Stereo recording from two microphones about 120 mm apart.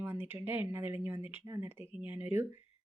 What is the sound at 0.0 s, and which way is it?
Speech, 15° right (ahead or behind).